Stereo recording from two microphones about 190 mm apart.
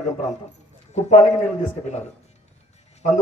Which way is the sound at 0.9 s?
35° left (ahead or behind).